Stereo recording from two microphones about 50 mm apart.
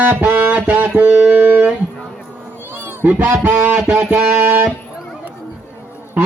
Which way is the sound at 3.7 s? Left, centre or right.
Centre.